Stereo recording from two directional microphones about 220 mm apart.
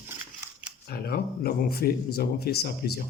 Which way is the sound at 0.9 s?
45° left (ahead or behind).